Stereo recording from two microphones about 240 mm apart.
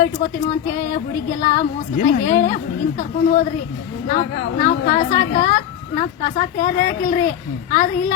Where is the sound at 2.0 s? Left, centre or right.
Left.